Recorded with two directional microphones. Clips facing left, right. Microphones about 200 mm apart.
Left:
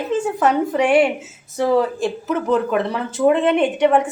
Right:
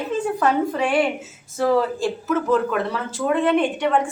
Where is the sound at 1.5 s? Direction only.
20° left (ahead or behind).